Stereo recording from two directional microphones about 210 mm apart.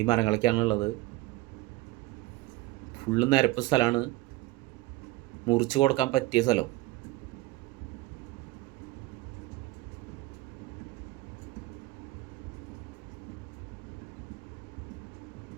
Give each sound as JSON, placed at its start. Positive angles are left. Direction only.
{"t": 0.0, "sound": "speech", "side_deg": 20}
{"t": 3.1, "sound": "speech", "side_deg": 20}
{"t": 5.5, "sound": "speech", "side_deg": 20}